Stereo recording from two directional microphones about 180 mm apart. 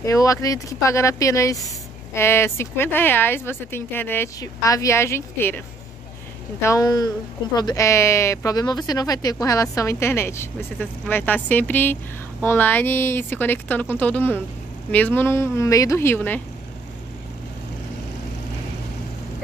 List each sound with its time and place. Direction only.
0.0 s speech: 20° left (ahead or behind)
6.6 s speech: 20° left (ahead or behind)